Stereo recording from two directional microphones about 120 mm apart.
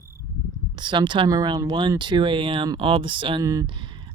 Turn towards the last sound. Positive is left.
turn(degrees=-45)  # may be behind; listen again after turning